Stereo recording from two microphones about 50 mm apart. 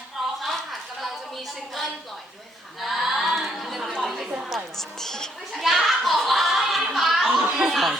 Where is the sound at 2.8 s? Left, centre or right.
Centre.